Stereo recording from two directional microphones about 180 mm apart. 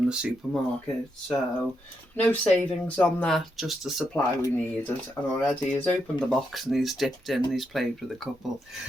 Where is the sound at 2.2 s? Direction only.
10° left (ahead or behind).